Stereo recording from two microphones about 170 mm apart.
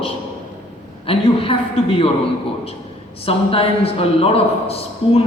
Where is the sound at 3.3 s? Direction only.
35° left (ahead or behind).